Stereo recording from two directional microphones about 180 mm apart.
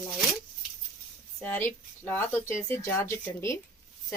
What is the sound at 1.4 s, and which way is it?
Speech, 10° left (ahead or behind).